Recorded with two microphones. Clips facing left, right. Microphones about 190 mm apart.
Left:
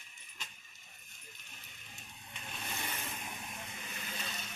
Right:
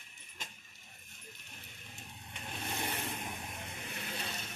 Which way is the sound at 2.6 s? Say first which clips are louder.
Right 4 dB; 55° right (ahead or behind).